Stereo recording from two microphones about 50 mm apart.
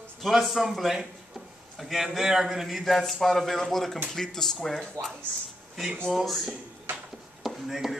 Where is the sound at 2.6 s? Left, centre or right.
Centre.